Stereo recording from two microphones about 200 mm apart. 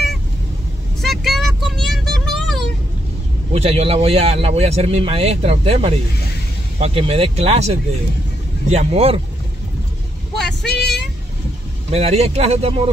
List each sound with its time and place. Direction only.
1.0 s vehicle: centre (ahead or behind)
3.5 s speech: 30° right (ahead or behind)
10.3 s vehicle: centre (ahead or behind)
11.9 s speech: 30° right (ahead or behind)